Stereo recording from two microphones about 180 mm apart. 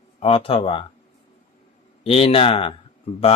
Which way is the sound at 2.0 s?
30° left (ahead or behind).